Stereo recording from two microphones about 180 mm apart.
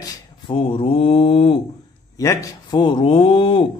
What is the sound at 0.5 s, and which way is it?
Mantra, 30° left (ahead or behind).